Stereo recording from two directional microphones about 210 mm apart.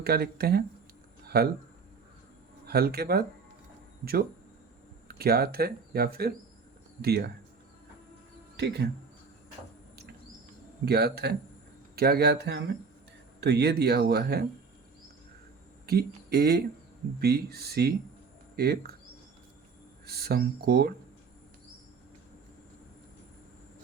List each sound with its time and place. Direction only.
0.0 s speech: 50° right (ahead or behind)
2.6 s speech: 45° right (ahead or behind)
8.5 s speech: 55° right (ahead or behind)
10.8 s speech: 50° right (ahead or behind)
15.9 s speech: 50° right (ahead or behind)
20.1 s speech: 50° right (ahead or behind)